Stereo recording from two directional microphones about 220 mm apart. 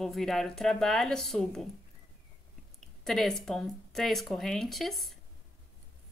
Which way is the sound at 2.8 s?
Centre (ahead or behind).